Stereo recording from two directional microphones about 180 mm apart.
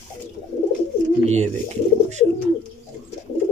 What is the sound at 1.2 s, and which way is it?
Speech, 40° right (ahead or behind).